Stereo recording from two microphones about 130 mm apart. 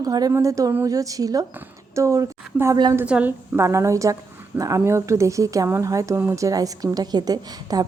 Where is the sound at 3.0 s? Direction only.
10° right (ahead or behind).